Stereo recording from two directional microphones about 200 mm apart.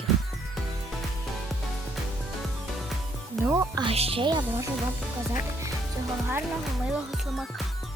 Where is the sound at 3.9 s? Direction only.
30° right (ahead or behind).